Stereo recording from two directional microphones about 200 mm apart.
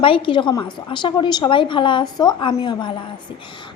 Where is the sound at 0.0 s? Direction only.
25° left (ahead or behind).